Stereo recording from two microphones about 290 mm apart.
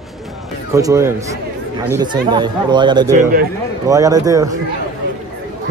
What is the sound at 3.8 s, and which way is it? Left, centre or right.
Speech, centre.